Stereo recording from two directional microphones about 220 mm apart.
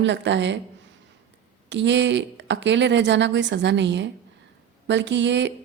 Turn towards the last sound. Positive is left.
turn(degrees=-55)  # may be behind; listen again after turning